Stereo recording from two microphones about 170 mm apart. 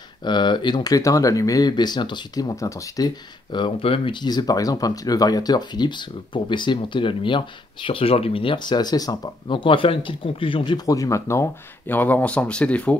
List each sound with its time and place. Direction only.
0.2 s speech: 25° left (ahead or behind)
3.5 s speech: 30° left (ahead or behind); by 12.9 s 5° left (ahead or behind)